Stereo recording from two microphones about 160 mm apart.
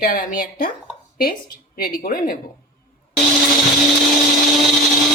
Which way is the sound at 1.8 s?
65° left (ahead or behind).